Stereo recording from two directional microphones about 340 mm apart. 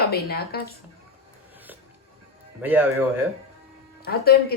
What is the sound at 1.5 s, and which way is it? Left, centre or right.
Music, centre.